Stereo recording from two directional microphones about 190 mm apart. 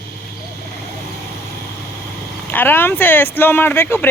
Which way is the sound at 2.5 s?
10° left (ahead or behind).